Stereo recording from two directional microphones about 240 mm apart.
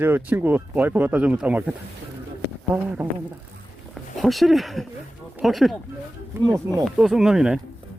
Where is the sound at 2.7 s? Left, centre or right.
Centre.